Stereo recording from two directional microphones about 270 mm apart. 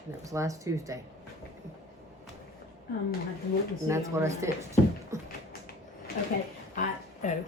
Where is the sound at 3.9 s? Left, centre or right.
Centre.